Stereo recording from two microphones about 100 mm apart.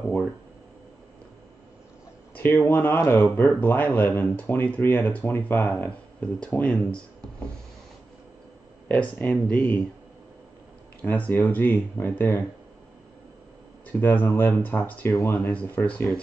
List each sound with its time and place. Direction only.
2.3 s speech: 20° left (ahead or behind)
8.8 s speech: 15° left (ahead or behind)
11.0 s speech: 15° left (ahead or behind)
13.9 s speech: 20° left (ahead or behind)